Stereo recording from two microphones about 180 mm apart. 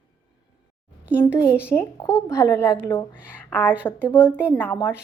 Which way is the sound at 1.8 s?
15° left (ahead or behind).